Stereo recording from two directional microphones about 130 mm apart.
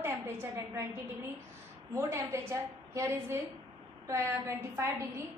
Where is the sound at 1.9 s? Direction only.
20° right (ahead or behind).